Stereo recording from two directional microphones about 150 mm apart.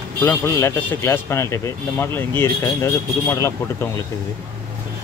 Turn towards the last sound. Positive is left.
turn(degrees=20)  # may be behind; listen again after turning